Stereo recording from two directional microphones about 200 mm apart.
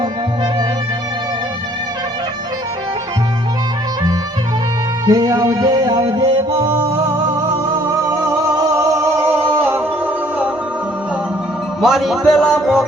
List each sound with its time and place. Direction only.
5.0 s music: 20° right (ahead or behind)
8.0 s music: 15° right (ahead or behind)
11.8 s music: centre (ahead or behind)